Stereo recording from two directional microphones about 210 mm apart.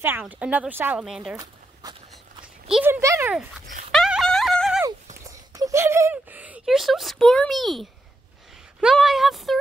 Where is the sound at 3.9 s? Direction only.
Centre (ahead or behind).